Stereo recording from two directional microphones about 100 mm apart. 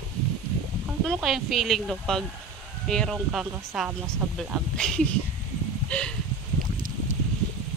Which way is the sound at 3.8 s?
25° right (ahead or behind).